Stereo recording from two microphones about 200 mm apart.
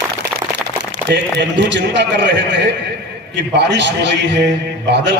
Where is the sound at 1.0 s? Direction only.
60° right (ahead or behind).